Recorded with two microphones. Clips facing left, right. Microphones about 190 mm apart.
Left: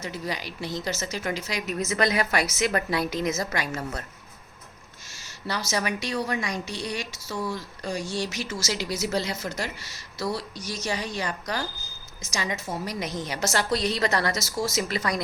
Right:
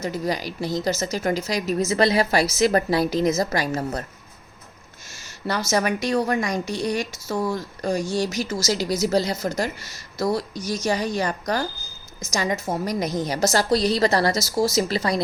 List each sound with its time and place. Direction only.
0.0 s speech: 40° right (ahead or behind)
5.1 s a woman's voice: 50° right (ahead or behind); by 15.2 s 30° right (ahead or behind)